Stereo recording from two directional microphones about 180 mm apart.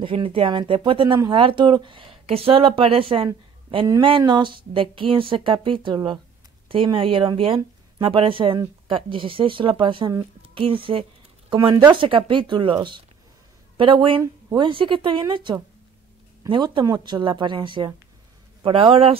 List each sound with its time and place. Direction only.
0.0 s speech: 30° right (ahead or behind)